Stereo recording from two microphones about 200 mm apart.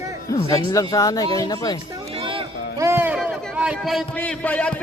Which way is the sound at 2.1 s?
25° right (ahead or behind).